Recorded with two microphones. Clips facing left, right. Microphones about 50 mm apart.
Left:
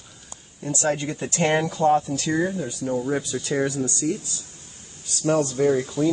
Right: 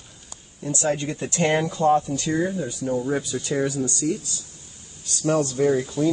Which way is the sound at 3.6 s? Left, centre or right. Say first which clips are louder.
Even; left.